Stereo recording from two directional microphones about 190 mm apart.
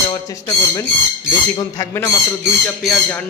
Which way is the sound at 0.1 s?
15° left (ahead or behind).